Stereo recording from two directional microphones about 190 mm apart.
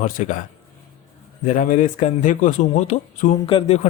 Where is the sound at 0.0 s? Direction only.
45° left (ahead or behind).